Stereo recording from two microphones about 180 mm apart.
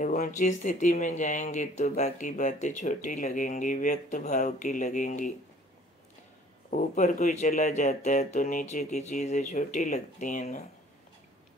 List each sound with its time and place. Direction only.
0.0 s speech: 40° left (ahead or behind)
6.7 s speech: 45° left (ahead or behind)